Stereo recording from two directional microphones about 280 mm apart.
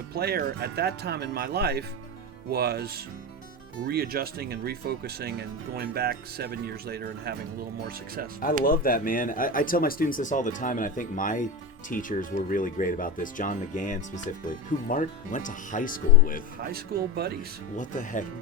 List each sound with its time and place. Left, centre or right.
0.1 s speech: right
8.6 s speech: left
16.6 s speech: right
17.7 s speech: left